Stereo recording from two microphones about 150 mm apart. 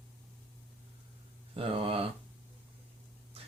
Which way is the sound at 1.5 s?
40° right (ahead or behind).